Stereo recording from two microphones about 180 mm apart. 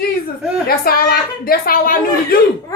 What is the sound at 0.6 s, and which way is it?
A woman's voice, 55° left (ahead or behind).